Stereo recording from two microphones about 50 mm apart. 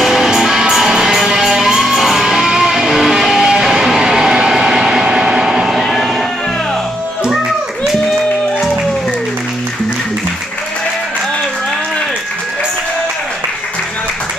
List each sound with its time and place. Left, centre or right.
0.0 s music: centre